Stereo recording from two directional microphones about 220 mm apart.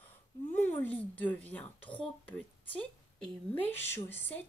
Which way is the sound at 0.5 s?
10° left (ahead or behind).